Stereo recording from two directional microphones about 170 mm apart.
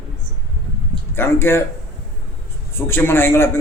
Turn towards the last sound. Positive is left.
turn(degrees=15)  # may be behind; listen again after turning